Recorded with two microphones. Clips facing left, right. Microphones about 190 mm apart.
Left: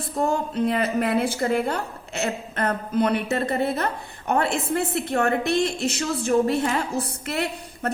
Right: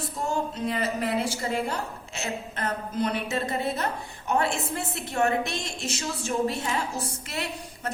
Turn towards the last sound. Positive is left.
turn(degrees=60)  # may be behind; listen again after turning